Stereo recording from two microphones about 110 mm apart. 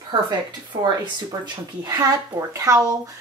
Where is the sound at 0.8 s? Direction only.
40° right (ahead or behind).